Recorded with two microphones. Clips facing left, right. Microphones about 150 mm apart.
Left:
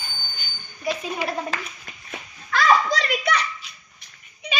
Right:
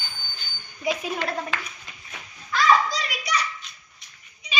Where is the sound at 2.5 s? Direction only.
55° left (ahead or behind).